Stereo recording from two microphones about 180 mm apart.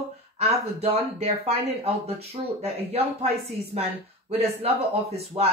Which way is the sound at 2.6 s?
35° right (ahead or behind).